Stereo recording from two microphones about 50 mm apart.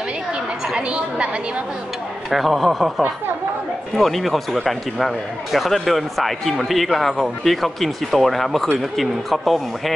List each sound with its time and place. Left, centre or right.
0.7 s a woman's voice: right
2.3 s speech: centre
3.9 s speech: centre